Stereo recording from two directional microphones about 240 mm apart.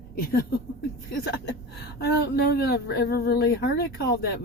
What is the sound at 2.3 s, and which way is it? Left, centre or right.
Speech, left.